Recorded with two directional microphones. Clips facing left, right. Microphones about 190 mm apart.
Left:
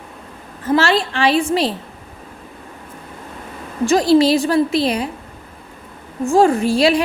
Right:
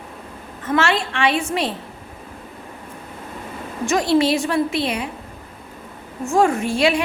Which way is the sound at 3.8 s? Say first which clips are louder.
Left 5 dB; 35° left (ahead or behind).